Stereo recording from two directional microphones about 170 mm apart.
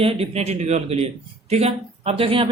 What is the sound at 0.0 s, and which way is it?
A man's voice, 35° right (ahead or behind).